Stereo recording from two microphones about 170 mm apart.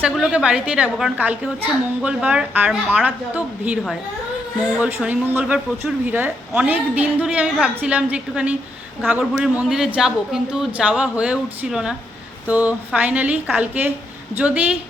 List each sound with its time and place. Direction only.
0.0 s a woman's voice: 5° right (ahead or behind)